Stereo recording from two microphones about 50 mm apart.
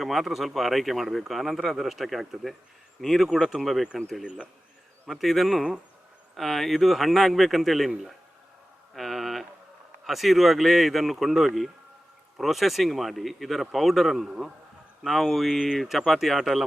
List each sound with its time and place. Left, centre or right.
0.0 s speech: centre
4.2 s speech: right
5.0 s speech: centre
9.0 s a sound: centre
10.1 s speech: centre